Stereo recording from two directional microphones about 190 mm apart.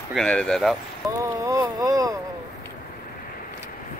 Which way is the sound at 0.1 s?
5° left (ahead or behind).